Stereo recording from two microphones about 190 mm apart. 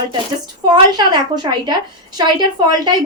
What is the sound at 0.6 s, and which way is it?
A woman's voice, 20° right (ahead or behind).